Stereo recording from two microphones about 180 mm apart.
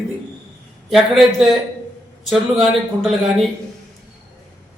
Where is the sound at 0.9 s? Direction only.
Centre (ahead or behind).